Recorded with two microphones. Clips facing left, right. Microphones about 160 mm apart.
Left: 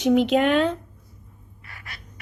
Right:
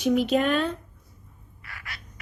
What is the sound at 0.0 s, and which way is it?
Speech, 90° left.